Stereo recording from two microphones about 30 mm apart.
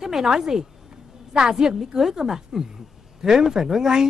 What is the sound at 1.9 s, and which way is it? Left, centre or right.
Speech, centre.